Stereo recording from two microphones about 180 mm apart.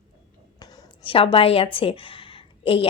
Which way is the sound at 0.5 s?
20° left (ahead or behind).